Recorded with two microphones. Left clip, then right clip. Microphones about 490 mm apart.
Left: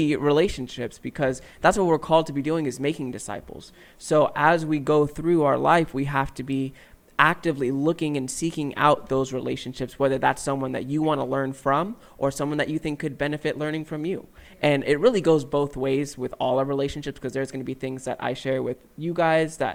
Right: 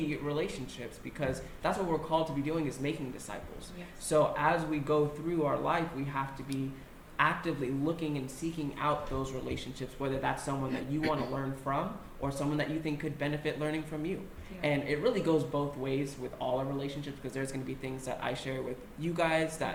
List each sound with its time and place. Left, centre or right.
0.1 s speech: left